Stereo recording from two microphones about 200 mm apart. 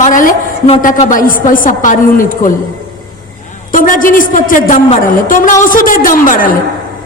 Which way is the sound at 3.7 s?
40° left (ahead or behind).